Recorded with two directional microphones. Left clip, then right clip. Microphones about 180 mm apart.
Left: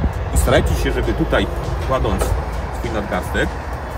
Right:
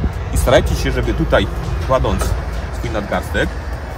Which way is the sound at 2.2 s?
60° left (ahead or behind).